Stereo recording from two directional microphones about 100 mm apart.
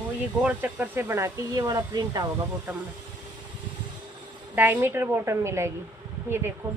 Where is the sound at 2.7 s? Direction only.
15° right (ahead or behind).